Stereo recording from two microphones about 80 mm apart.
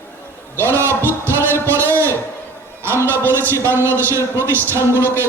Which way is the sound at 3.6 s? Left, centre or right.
Right.